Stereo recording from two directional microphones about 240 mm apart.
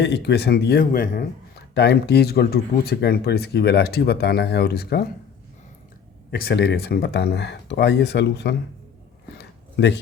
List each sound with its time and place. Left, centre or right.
0.0 s speech: left
6.3 s speech: left
9.4 s a sound: left